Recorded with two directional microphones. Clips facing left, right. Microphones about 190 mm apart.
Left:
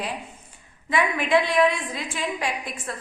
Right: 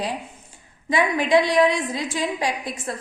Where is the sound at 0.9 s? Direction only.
35° right (ahead or behind).